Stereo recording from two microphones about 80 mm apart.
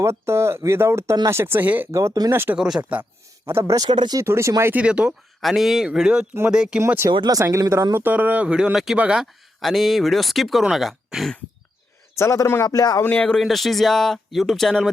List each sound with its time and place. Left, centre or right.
0.0 s speech: right
1.9 s speech: right
2.6 s speech: centre
3.5 s speech: right
3.8 s speech: right
4.2 s speech: right
4.7 s speech: centre
5.4 s speech: centre
6.7 s speech: right
7.9 s speech: right
9.6 s speech: centre
12.1 s a man's voice: left
12.6 s speech: left
13.4 s speech: centre